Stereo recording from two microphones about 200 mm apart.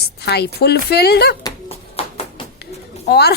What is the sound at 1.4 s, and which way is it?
Hands, 25° left (ahead or behind).